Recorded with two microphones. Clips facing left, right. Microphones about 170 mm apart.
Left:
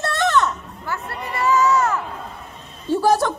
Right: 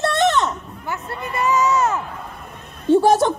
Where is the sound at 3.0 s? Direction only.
20° right (ahead or behind).